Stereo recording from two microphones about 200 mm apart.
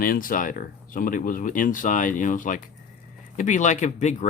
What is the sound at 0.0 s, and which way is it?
Speech, 45° left (ahead or behind).